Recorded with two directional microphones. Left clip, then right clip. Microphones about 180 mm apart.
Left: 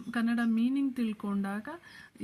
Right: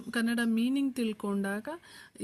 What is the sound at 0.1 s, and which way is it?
Speech, 35° right (ahead or behind).